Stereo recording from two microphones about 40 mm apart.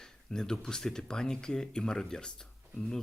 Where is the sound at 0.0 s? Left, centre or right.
Centre.